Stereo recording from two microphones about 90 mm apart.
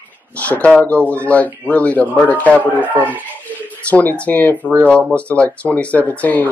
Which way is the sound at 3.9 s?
15° left (ahead or behind).